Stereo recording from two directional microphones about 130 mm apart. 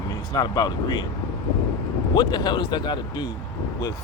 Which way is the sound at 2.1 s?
35° left (ahead or behind).